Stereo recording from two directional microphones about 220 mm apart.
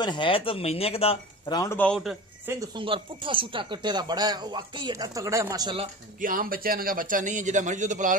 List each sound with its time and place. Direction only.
0.0 s speech: 20° left (ahead or behind)
2.0 s speech: 5° right (ahead or behind)
2.6 s speech: 20° right (ahead or behind)
6.2 s a man's voice: 40° right (ahead or behind)